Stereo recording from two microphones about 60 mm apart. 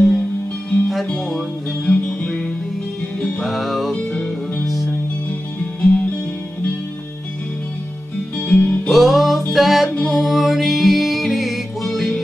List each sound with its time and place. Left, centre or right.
0.8 s music: centre
3.4 s music: centre
3.9 s music: centre
4.6 s music: centre
5.8 s music: centre
8.5 s music: centre
8.8 s music: centre